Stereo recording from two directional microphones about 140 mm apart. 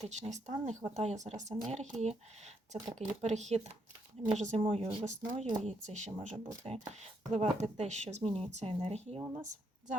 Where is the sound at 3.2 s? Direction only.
55° right (ahead or behind).